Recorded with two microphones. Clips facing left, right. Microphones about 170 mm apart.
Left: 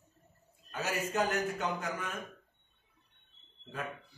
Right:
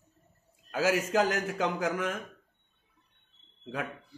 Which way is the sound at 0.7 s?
85° right.